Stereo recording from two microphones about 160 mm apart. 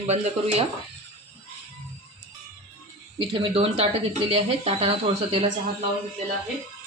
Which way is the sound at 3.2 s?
35° right (ahead or behind).